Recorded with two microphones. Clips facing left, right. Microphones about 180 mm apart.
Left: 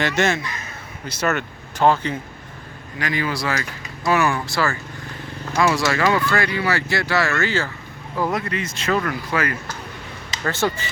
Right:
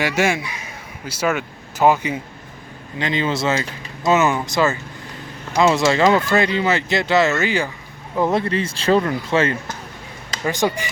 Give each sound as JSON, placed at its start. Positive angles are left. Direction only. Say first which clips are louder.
{"t": 0.0, "sound": "speech", "louder": "right 1 dB", "side_deg": -10}
{"t": 3.0, "sound": "speech", "louder": "right 3 dB", "side_deg": -25}
{"t": 10.4, "sound": "speech", "louder": "right 2 dB", "side_deg": -15}